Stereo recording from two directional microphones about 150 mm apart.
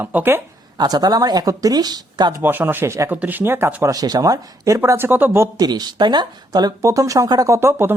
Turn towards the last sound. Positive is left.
turn(degrees=-15)  # may be behind; listen again after turning